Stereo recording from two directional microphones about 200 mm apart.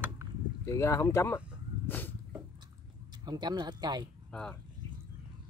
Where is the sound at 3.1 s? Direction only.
20° right (ahead or behind).